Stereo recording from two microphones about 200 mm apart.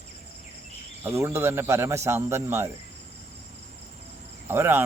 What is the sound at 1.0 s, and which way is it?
Speech, 15° right (ahead or behind).